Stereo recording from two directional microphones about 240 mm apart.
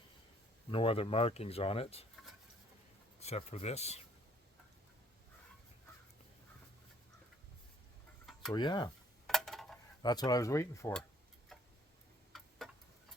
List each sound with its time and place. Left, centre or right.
0.7 s speech: left
3.2 s speech: left
8.3 s chicken: centre
8.5 s speech: centre
9.2 s a sound: centre
10.0 s speech: centre
12.3 s tick-tock: centre